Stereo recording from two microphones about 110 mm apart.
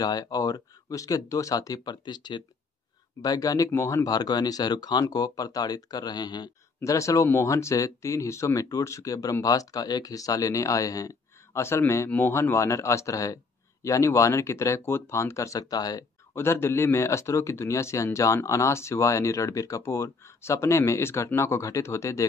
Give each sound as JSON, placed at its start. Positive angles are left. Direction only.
{"t": 0.0, "sound": "speech", "side_deg": 35}
{"t": 6.8, "sound": "speech", "side_deg": 30}
{"t": 16.3, "sound": "speech", "side_deg": 25}